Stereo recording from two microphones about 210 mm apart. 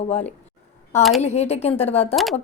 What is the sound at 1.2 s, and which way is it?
Speech, 30° left (ahead or behind).